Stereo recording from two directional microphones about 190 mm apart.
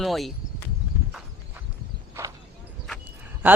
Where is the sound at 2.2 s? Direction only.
15° right (ahead or behind).